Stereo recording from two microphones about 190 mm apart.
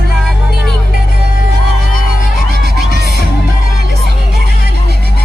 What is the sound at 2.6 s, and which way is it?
Music, 60° right (ahead or behind).